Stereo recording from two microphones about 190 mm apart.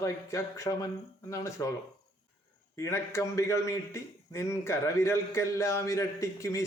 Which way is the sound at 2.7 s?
15° left (ahead or behind).